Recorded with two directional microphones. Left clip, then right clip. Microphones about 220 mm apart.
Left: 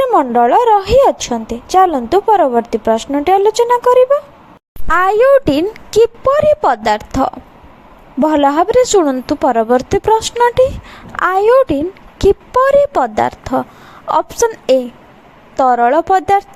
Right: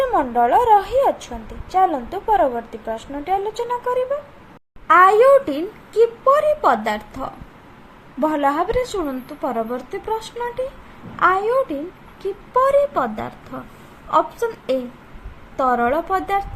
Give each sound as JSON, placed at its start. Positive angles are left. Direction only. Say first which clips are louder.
{"t": 0.0, "sound": "a woman's voice", "louder": "left 7 dB", "side_deg": 40}